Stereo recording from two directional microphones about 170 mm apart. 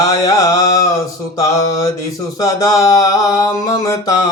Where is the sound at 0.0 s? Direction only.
20° left (ahead or behind).